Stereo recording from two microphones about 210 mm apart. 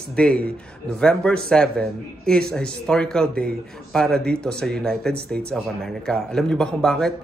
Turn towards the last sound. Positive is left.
turn(degrees=0)  # may be behind; listen again after turning